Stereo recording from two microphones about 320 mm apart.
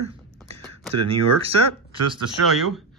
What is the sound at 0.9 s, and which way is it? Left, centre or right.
Speech, right.